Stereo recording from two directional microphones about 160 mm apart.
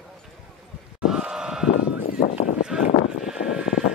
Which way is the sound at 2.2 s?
40° left (ahead or behind).